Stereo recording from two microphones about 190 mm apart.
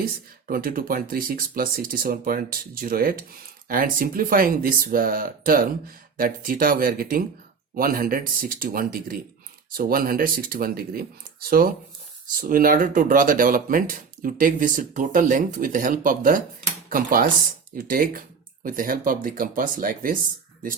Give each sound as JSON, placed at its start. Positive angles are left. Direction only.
{"t": 0.0, "sound": "speech", "side_deg": -50}